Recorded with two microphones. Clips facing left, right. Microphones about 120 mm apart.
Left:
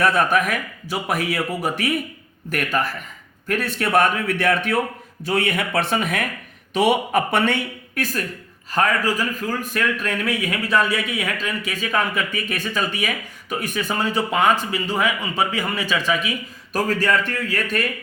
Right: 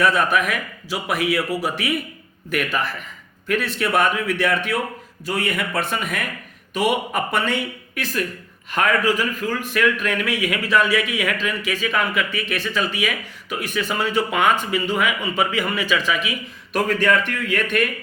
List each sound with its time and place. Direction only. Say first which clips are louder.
0.0 s a man's voice: even; 45° left (ahead or behind)
8.7 s a man's voice: right 1 dB; 35° left (ahead or behind)